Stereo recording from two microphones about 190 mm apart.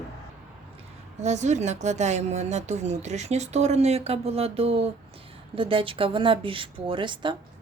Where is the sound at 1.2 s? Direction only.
35° right (ahead or behind).